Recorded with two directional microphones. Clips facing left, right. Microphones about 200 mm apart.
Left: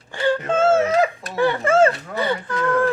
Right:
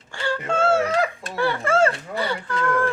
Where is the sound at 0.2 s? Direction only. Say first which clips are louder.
Left 4 dB; 20° left (ahead or behind).